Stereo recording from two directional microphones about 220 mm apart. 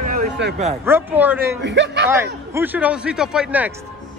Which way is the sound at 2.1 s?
10° right (ahead or behind).